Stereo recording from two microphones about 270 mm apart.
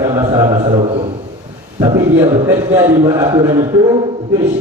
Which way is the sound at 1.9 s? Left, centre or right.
Centre.